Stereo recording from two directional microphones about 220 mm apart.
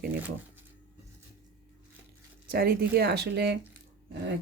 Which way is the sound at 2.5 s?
45° right (ahead or behind).